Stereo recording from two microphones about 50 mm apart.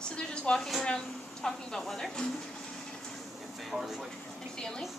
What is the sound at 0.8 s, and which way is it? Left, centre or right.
Speech, centre.